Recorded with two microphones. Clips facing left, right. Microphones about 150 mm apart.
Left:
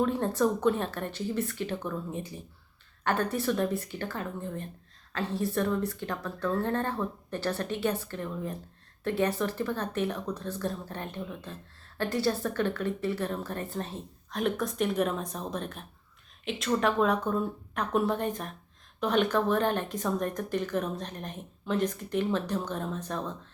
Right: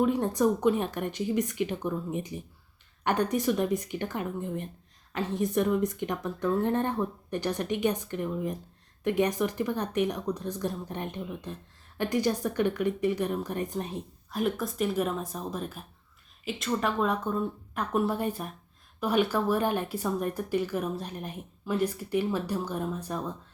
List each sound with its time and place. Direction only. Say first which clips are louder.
0.0 s speech: right 2 dB; 15° right (ahead or behind)
14.3 s speech: even; 5° right (ahead or behind)